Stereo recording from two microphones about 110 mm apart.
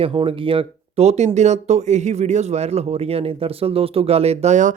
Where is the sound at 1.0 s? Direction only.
80° right.